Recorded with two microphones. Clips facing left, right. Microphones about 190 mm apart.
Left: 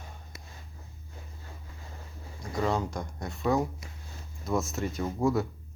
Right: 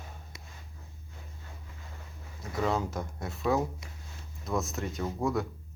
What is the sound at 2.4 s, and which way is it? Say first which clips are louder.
Speech: left 1 dB; 5° right (ahead or behind).